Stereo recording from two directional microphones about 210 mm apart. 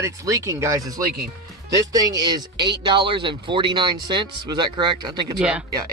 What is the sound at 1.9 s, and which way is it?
Speech, 15° right (ahead or behind).